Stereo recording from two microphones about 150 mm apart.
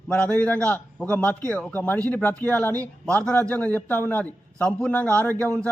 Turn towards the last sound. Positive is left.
turn(degrees=10)  # may be behind; listen again after turning